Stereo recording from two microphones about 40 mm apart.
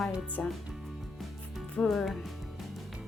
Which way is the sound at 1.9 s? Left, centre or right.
Centre.